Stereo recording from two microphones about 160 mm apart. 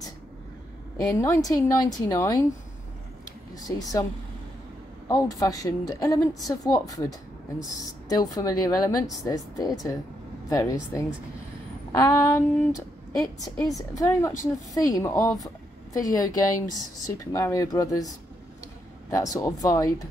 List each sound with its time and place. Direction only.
1.0 s a woman's voice: 20° left (ahead or behind)
3.5 s a woman's voice: 20° left (ahead or behind)
5.0 s a woman's voice: 20° left (ahead or behind)
15.4 s a sound: 20° left (ahead or behind)
16.7 s a woman's voice: 20° left (ahead or behind)